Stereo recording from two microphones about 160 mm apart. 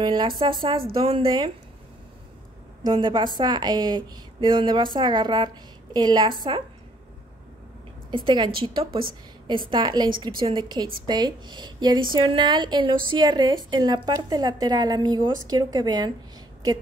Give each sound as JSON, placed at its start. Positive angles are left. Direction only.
{"t": 0.0, "sound": "a woman's voice", "side_deg": -30}
{"t": 2.8, "sound": "a woman's voice", "side_deg": -30}
{"t": 8.1, "sound": "a woman's voice", "side_deg": -30}